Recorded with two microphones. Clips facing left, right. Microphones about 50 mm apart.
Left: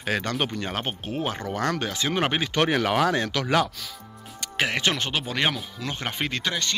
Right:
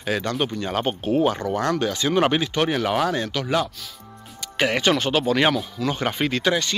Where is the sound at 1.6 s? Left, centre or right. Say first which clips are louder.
Right 2 dB; left.